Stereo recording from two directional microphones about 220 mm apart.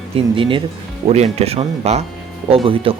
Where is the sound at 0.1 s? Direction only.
25° right (ahead or behind).